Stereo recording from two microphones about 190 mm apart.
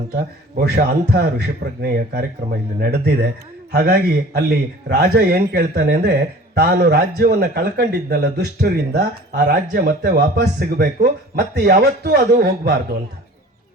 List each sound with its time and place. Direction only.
0.2 s a man's voice: 55° right (ahead or behind)